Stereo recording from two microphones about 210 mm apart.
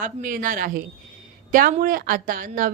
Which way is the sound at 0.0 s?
40° right (ahead or behind).